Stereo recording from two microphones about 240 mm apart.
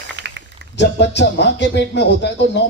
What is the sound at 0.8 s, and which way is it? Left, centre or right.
Speech, left.